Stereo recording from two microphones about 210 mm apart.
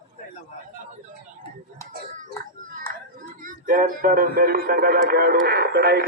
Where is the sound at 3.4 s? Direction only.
40° right (ahead or behind).